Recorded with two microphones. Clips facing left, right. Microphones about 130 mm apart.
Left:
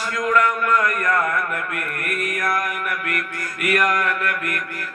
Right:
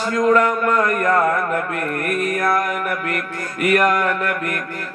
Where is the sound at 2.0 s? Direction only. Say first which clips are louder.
Right 5 dB; 30° right (ahead or behind).